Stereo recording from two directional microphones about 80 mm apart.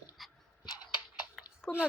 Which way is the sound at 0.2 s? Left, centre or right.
Centre.